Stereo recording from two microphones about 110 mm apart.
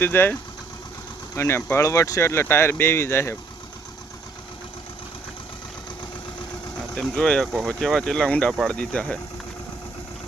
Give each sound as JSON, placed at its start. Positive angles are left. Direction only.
{"t": 0.0, "sound": "speech", "side_deg": 20}
{"t": 1.4, "sound": "speech", "side_deg": 25}
{"t": 6.9, "sound": "speech", "side_deg": 5}